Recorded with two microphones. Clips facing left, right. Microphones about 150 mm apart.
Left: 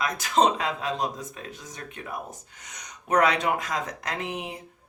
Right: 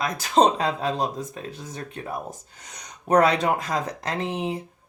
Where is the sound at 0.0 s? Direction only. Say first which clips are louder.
Right 3 dB; 35° right (ahead or behind).